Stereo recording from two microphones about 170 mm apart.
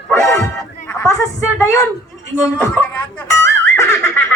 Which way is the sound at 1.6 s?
20° left (ahead or behind).